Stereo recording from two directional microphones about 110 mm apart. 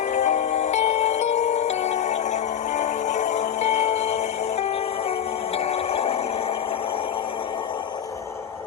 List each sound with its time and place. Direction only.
0.1 s music: 90° left
5.5 s music: 65° left (ahead or behind)